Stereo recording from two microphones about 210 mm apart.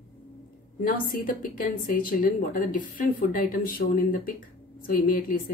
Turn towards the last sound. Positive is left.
turn(degrees=45)  # may be behind; listen again after turning